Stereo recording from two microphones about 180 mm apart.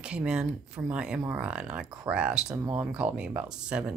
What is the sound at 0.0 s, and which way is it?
Speech, 5° right (ahead or behind).